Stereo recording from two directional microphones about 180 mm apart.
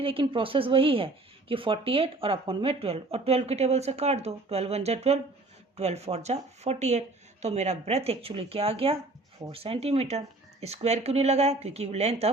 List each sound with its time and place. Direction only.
0.0 s speech: 30° right (ahead or behind)